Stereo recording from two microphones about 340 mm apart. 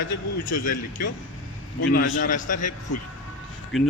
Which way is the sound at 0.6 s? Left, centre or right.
Left.